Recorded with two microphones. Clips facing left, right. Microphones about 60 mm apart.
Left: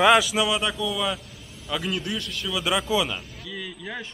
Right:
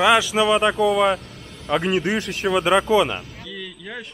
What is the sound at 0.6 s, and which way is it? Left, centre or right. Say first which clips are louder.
Speech: right 9 dB; right.